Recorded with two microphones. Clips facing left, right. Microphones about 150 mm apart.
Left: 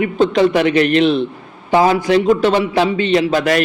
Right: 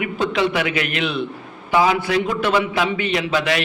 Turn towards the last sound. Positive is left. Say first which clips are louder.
# left 5 dB
turn(degrees=45)  # may be behind; listen again after turning